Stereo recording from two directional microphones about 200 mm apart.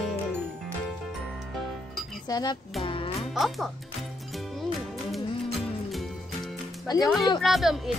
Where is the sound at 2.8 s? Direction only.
25° left (ahead or behind).